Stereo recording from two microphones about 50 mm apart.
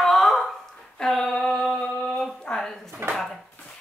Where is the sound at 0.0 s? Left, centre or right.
Centre.